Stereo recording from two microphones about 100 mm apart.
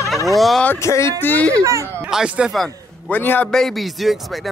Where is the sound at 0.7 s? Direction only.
30° left (ahead or behind).